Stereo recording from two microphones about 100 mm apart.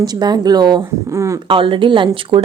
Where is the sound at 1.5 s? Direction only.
60° right (ahead or behind).